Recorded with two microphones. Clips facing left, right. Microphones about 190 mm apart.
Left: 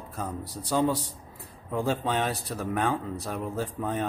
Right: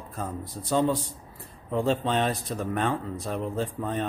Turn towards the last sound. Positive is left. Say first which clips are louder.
# right 1 dB
turn(degrees=0)  # may be behind; listen again after turning